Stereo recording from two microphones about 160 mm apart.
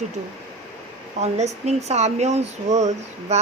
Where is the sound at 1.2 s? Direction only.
45° right (ahead or behind).